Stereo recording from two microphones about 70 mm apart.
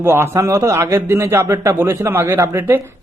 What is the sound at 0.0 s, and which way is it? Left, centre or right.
A man's voice, right.